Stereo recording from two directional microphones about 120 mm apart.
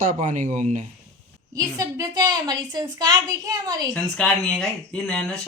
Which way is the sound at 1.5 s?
30° right (ahead or behind).